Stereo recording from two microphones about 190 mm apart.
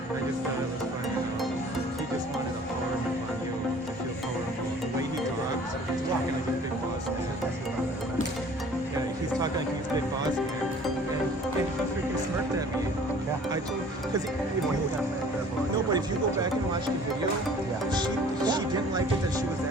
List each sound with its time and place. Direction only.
15.9 s speech: 20° right (ahead or behind)
17.9 s speech: 25° right (ahead or behind)